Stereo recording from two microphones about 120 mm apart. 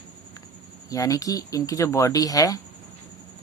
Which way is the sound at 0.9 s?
30° left (ahead or behind).